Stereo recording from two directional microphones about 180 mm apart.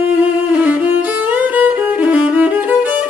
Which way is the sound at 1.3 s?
10° right (ahead or behind).